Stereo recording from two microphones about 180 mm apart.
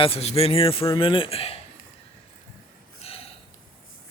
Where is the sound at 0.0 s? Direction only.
35° left (ahead or behind).